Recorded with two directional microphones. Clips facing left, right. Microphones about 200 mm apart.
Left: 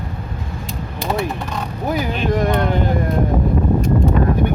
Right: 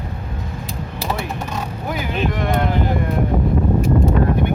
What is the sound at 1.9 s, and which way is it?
Speech, 40° left (ahead or behind).